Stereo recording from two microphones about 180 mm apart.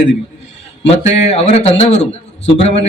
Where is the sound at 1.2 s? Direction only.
35° left (ahead or behind).